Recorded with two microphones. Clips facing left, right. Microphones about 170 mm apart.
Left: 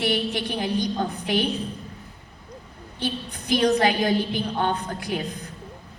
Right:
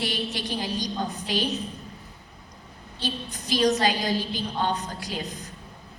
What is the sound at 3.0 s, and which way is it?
A woman's voice, 55° left (ahead or behind).